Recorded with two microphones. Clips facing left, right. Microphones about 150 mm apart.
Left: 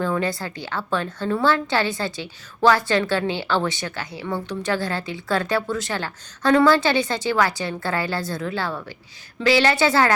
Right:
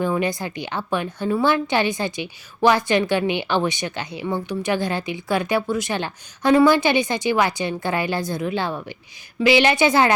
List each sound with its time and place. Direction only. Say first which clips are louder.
0.0 s a woman's voice: right 2 dB; 15° right (ahead or behind)